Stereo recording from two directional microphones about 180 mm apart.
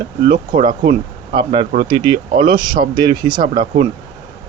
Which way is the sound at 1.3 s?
30° right (ahead or behind).